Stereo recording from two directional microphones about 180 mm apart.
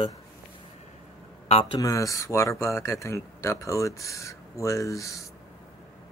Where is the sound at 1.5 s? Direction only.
30° left (ahead or behind).